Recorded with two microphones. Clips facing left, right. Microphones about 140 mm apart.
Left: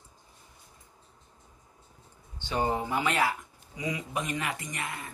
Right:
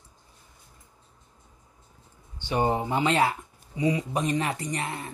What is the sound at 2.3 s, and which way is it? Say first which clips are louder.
Speech: right 4 dB; 15° right (ahead or behind).